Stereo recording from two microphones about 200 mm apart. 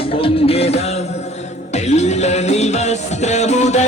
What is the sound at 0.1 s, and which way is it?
Music, 30° left (ahead or behind).